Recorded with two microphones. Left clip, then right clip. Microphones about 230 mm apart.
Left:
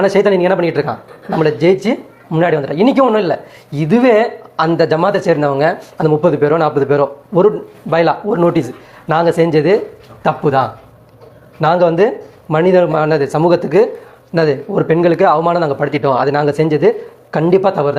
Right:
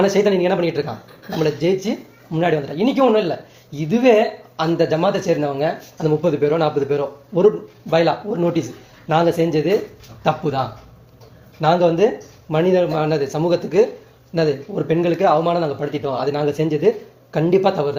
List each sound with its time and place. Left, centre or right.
0.0 s speech: centre